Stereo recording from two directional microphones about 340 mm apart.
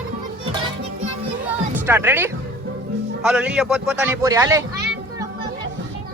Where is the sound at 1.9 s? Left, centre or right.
Centre.